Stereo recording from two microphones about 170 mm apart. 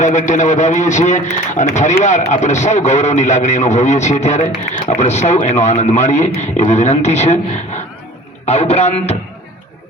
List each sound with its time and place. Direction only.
0.0 s a man's voice: 45° left (ahead or behind)